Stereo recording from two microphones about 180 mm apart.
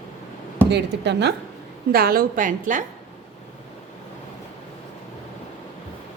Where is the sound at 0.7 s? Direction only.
70° right (ahead or behind).